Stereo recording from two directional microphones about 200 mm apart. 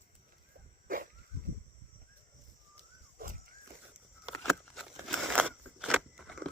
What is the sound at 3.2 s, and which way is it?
Walk, 45° right (ahead or behind).